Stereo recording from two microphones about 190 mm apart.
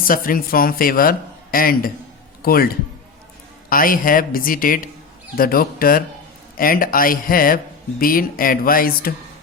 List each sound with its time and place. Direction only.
0.1 s a man's voice: 50° left (ahead or behind)